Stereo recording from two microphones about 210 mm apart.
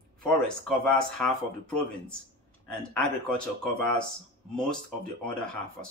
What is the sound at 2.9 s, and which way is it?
Speech, 5° left (ahead or behind).